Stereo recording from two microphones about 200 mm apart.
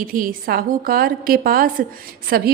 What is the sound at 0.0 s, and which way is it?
Speech, 45° right (ahead or behind).